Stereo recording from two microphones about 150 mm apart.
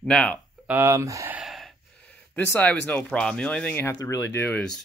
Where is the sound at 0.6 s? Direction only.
15° right (ahead or behind).